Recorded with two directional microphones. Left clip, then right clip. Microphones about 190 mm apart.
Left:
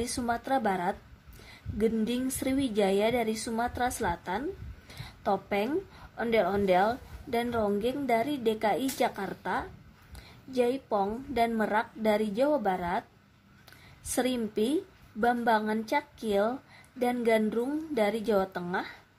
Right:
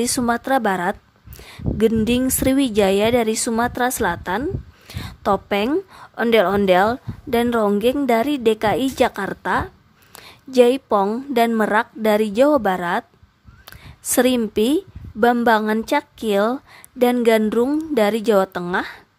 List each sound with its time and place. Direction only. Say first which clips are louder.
0.0 s speech: right 11 dB; 40° right (ahead or behind)